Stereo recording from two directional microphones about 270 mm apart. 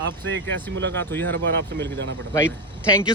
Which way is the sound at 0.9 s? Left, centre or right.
Centre.